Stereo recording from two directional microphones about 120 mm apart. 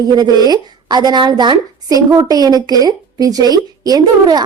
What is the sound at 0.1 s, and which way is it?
A woman's voice, 35° right (ahead or behind).